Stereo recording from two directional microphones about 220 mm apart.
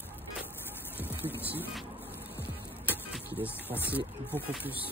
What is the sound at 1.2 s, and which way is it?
Music, 10° right (ahead or behind).